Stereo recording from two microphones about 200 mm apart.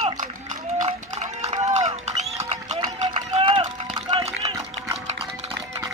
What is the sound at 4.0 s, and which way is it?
Run, 30° right (ahead or behind).